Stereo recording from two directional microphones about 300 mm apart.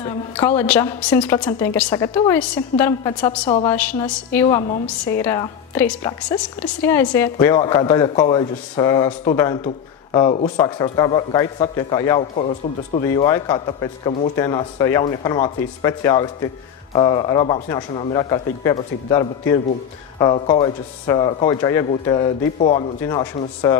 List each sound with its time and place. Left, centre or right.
0.0 s a woman's voice: centre
13.0 s a woman's voice: centre